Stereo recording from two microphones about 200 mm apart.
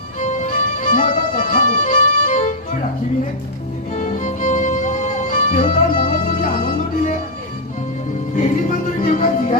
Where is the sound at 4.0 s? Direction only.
40° left (ahead or behind).